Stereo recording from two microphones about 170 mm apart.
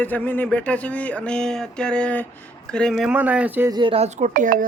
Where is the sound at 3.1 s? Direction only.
10° right (ahead or behind).